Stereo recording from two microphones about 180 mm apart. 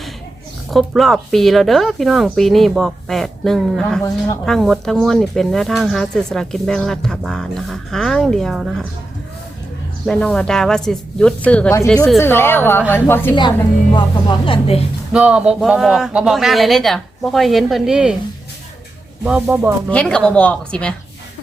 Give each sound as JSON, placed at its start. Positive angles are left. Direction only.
{"t": 0.7, "sound": "speech", "side_deg": 0}
{"t": 10.1, "sound": "a woman's voice", "side_deg": 5}
{"t": 13.9, "sound": "speech", "side_deg": 25}
{"t": 15.1, "sound": "speech", "side_deg": -5}
{"t": 19.2, "sound": "speech", "side_deg": -5}
{"t": 19.9, "sound": "speech", "side_deg": 5}